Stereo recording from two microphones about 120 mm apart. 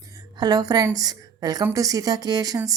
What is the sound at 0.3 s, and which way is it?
A woman's voice, 35° right (ahead or behind).